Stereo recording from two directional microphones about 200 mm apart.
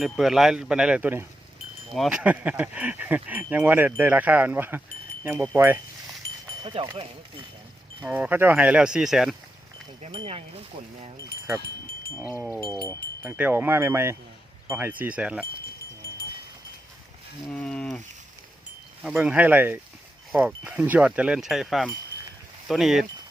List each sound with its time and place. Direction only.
0.0 s speech: centre (ahead or behind)
6.6 s speech: 25° right (ahead or behind)
8.0 s speech: 5° right (ahead or behind)
10.0 s speech: 25° right (ahead or behind)
12.6 s speech: 20° right (ahead or behind)
13.2 s speech: 10° right (ahead or behind)
17.5 s speech: 5° left (ahead or behind)
19.0 s speech: 5° right (ahead or behind)